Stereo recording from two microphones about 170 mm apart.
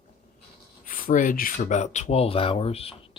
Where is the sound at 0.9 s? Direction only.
55° left (ahead or behind).